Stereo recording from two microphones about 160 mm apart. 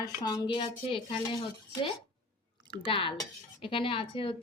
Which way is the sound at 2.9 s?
35° left (ahead or behind).